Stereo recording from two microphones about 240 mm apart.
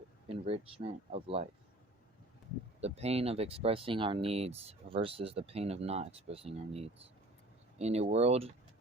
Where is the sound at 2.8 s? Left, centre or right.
Right.